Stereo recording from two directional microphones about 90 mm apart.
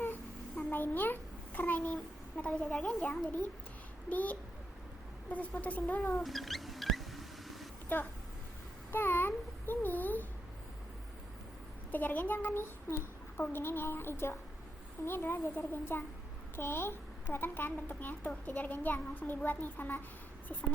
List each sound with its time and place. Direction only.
0.7 s a child's voice: 20° left (ahead or behind)
6.1 s a sound: centre (ahead or behind)
7.9 s a child's voice: 20° left (ahead or behind)
11.9 s a child's voice: 20° left (ahead or behind)